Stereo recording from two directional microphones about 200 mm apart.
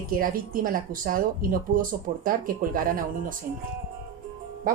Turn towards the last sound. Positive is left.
turn(degrees=-45)  # may be behind; listen again after turning